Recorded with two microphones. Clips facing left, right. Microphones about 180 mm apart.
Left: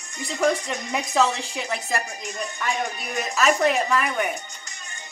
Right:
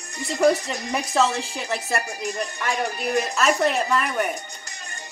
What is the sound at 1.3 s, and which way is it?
Speech, 35° right (ahead or behind).